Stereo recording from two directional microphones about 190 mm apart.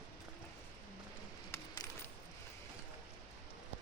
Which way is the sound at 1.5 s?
15° left (ahead or behind).